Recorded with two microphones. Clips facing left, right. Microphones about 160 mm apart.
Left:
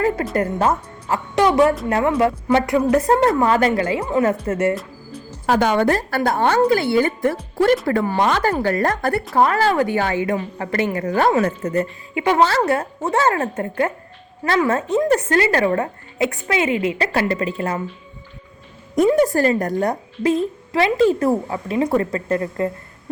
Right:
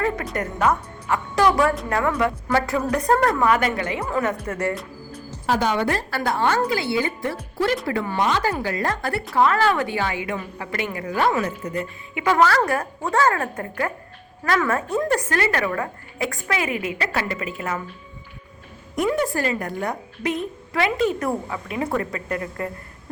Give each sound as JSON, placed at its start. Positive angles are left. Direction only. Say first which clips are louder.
{"t": 0.3, "sound": "a woman's voice", "louder": "left 3 dB", "side_deg": 30}
{"t": 5.5, "sound": "a woman's voice", "louder": "left 5 dB", "side_deg": 55}
{"t": 8.2, "sound": "a woman's voice", "louder": "left 2 dB", "side_deg": 55}
{"t": 12.1, "sound": "a woman's voice", "louder": "left 2 dB", "side_deg": 25}
{"t": 19.2, "sound": "a woman's voice", "louder": "left 7 dB", "side_deg": 40}